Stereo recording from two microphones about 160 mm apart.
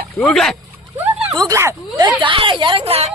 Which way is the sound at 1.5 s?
20° right (ahead or behind).